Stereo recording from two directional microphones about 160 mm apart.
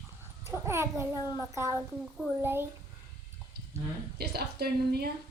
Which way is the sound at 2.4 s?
15° right (ahead or behind).